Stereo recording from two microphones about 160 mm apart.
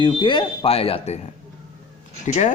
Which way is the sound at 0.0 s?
30° left (ahead or behind).